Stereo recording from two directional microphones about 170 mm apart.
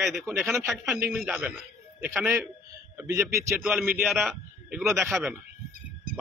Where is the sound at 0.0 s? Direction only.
Centre (ahead or behind).